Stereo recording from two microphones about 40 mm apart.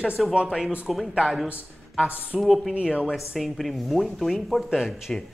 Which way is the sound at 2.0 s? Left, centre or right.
Right.